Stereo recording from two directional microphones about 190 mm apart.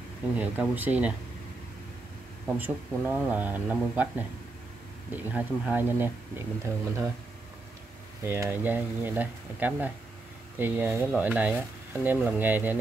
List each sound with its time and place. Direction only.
0.4 s speech: 10° right (ahead or behind)
2.4 s speech: 10° right (ahead or behind)
5.1 s speech: 10° right (ahead or behind)
8.3 s speech: 10° right (ahead or behind)